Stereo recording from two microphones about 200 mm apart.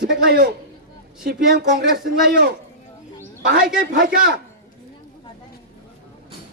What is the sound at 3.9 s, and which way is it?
Speech, 45° right (ahead or behind).